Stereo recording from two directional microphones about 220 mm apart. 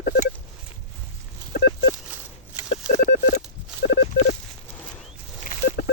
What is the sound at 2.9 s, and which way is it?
Telephone dialing, 45° left (ahead or behind).